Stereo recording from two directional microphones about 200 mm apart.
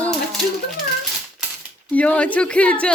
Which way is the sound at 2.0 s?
5° left (ahead or behind).